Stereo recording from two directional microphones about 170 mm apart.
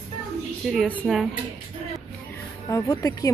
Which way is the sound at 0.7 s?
10° left (ahead or behind).